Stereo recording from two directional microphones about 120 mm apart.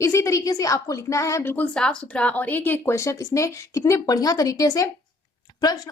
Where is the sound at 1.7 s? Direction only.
5° left (ahead or behind).